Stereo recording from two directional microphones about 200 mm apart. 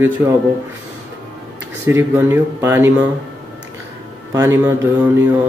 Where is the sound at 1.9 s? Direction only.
10° right (ahead or behind).